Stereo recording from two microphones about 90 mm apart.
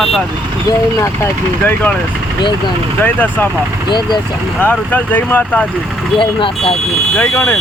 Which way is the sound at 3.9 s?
55° left (ahead or behind).